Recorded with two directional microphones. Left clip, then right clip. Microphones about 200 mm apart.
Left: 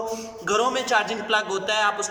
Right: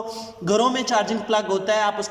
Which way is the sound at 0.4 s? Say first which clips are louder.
Right 2 dB; 30° right (ahead or behind).